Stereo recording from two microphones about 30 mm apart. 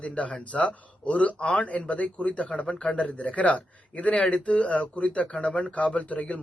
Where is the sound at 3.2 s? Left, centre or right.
Left.